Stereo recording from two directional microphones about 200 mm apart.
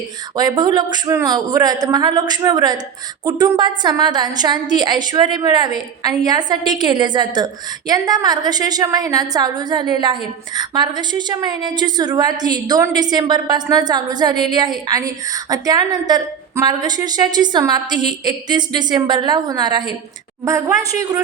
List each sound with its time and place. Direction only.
0.3 s a woman's voice: 20° right (ahead or behind)